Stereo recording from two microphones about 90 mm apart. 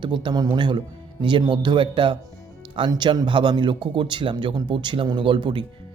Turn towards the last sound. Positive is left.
turn(degrees=-65)  # may be behind; listen again after turning